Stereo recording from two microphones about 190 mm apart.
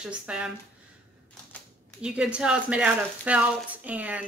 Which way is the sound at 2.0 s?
5° right (ahead or behind).